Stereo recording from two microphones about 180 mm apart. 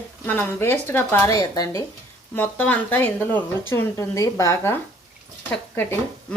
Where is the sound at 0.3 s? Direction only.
10° left (ahead or behind).